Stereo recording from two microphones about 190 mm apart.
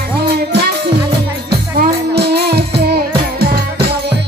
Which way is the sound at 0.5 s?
60° right (ahead or behind).